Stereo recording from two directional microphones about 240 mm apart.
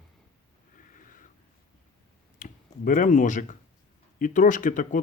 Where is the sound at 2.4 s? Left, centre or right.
Left.